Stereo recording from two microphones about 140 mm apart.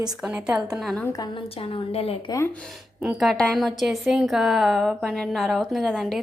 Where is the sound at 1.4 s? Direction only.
45° left (ahead or behind).